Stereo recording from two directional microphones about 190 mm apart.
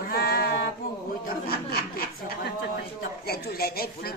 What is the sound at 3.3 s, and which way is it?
Speech, 55° left (ahead or behind).